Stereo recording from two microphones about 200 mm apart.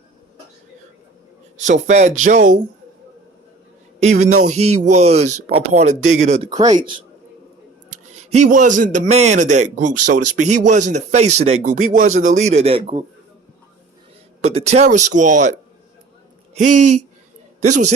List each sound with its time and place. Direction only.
1.5 s a man's voice: 35° right (ahead or behind)
4.0 s a man's voice: 35° right (ahead or behind)
6.5 s speech: 20° right (ahead or behind)
8.2 s a man's voice: 40° right (ahead or behind)
14.4 s a man's voice: 35° right (ahead or behind)
16.6 s a man's voice: 40° right (ahead or behind)